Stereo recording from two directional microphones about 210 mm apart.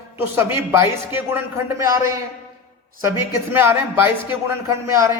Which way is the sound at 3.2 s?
10° right (ahead or behind).